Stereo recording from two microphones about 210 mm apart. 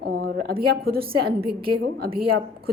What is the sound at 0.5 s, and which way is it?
Speech, 45° right (ahead or behind).